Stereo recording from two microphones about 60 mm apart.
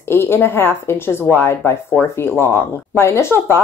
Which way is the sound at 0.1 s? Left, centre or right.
Left.